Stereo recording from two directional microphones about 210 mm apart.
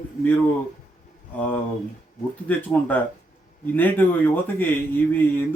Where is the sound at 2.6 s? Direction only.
10° left (ahead or behind).